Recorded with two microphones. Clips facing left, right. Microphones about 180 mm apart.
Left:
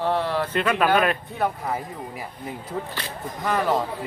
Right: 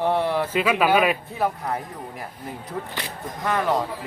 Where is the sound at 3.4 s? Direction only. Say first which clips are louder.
Even; centre (ahead or behind).